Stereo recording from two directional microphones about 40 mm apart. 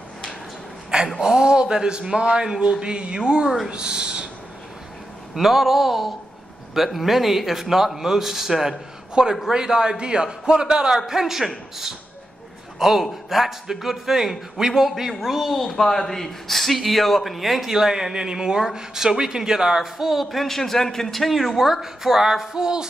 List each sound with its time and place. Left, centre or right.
1.2 s a man's voice: centre
5.3 s a woman's voice: centre
11.1 s a man's voice: centre